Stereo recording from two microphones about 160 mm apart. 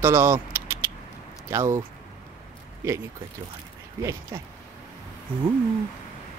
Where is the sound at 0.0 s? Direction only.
15° right (ahead or behind).